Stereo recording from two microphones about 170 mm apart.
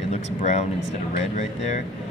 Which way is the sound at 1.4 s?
45° left (ahead or behind).